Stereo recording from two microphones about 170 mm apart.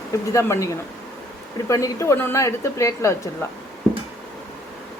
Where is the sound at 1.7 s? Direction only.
20° left (ahead or behind).